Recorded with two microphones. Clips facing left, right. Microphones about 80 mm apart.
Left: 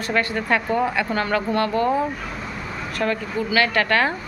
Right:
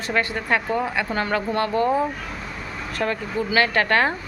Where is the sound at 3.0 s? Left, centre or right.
Right.